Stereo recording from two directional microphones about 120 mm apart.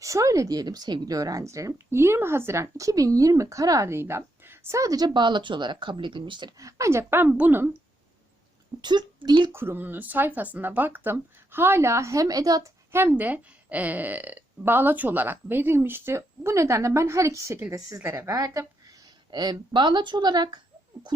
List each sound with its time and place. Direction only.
0.0 s speech: 25° right (ahead or behind); by 6.5 s 40° right (ahead or behind)
6.6 s speech: 25° right (ahead or behind)
8.8 s speech: 35° right (ahead or behind)
9.5 s speech: 20° right (ahead or behind)
12.9 s a woman's voice: 15° right (ahead or behind); by 20.6 s 35° right (ahead or behind)